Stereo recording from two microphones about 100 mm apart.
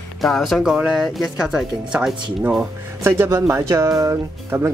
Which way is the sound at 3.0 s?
25° right (ahead or behind).